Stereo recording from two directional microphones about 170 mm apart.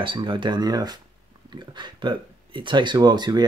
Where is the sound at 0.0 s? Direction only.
30° right (ahead or behind).